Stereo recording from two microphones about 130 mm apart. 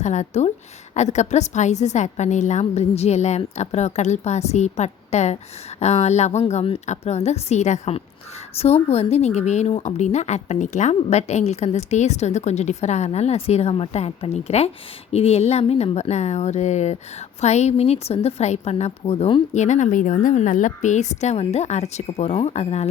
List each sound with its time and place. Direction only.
0.0 s speech: 65° left (ahead or behind)
19.5 s speech: 70° left (ahead or behind)